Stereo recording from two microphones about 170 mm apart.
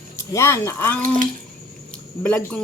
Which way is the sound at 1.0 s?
50° right (ahead or behind).